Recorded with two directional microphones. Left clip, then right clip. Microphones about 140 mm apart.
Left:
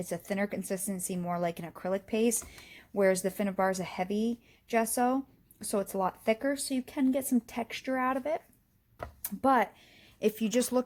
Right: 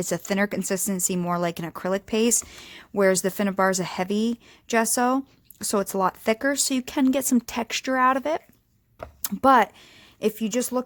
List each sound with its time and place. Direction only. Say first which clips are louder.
0.0 s speech: right 8 dB; 40° right (ahead or behind)
6.5 s speech: right 8 dB; 50° right (ahead or behind)
10.2 s speech: right 4 dB; 20° right (ahead or behind)